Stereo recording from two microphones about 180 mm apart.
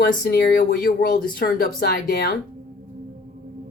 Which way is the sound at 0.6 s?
50° left (ahead or behind).